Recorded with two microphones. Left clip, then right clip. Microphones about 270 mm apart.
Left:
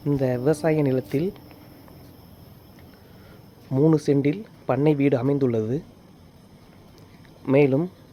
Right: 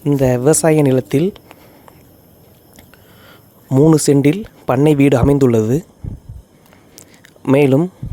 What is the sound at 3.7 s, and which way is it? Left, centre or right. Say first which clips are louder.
Speech: right 9 dB; right.